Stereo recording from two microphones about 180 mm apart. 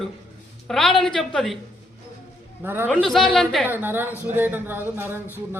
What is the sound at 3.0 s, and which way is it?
Speech, centre (ahead or behind).